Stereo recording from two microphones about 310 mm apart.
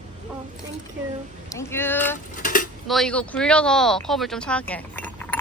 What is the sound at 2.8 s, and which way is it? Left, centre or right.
Speech, centre.